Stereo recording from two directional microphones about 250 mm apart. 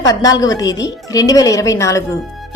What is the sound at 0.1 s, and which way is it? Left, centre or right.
A woman's voice, centre.